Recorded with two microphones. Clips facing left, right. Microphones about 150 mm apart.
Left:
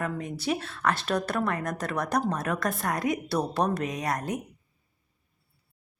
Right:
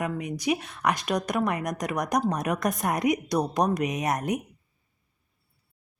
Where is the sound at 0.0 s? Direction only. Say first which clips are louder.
Right 2 dB; 15° right (ahead or behind).